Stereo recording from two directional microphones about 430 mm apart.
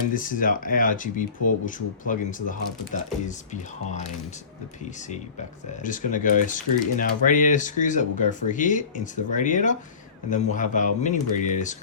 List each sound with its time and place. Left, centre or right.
0.1 s speech: centre
5.8 s speech: centre